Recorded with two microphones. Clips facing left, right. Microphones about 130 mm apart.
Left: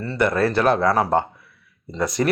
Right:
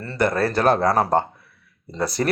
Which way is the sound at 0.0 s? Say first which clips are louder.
Left 1 dB; 40° right (ahead or behind).